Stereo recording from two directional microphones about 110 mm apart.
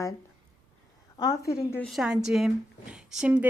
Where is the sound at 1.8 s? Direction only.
Centre (ahead or behind).